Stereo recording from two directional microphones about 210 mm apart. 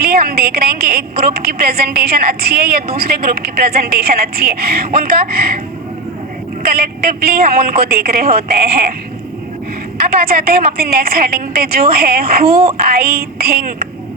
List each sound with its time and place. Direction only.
0.0 s a woman's voice: 45° right (ahead or behind)
6.7 s a woman's voice: 45° right (ahead or behind)
10.2 s a woman's voice: 45° right (ahead or behind)